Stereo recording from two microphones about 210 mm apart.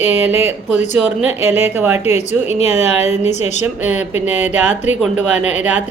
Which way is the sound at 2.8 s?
30° left (ahead or behind).